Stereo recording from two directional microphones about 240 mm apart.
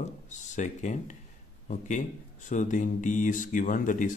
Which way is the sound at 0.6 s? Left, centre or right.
Left.